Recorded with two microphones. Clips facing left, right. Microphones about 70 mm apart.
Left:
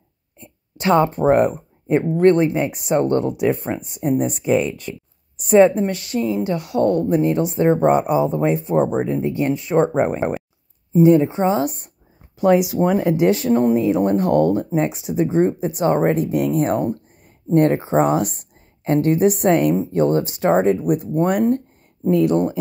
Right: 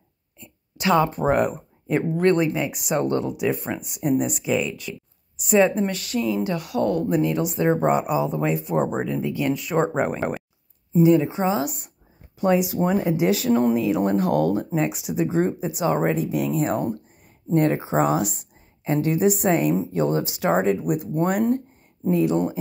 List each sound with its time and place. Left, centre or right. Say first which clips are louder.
0.4 s a sound: left 2 dB; left
1.3 s speech: left 5 dB; left
5.9 s speech: left 3 dB; left
11.0 s speech: left 4 dB; left
12.4 s speech: left 5 dB; left
13.5 s speech: left 3 dB; centre
13.9 s speech: left 3 dB; centre
15.1 s speech: left 5 dB; centre
15.6 s speech: left 4 dB; left